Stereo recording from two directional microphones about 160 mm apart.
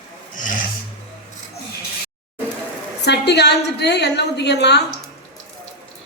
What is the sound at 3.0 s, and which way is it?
A woman's voice, 90° left.